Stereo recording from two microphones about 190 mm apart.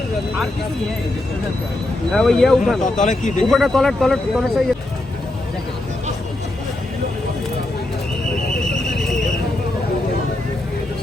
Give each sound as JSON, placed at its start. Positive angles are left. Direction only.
{"t": 2.1, "sound": "speech", "side_deg": 0}
{"t": 2.8, "sound": "speech", "side_deg": 40}
{"t": 3.5, "sound": "speech", "side_deg": 0}